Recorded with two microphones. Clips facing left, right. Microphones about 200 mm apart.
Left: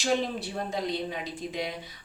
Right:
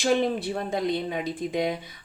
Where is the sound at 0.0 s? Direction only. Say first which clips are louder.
Right 5 dB; 55° right (ahead or behind).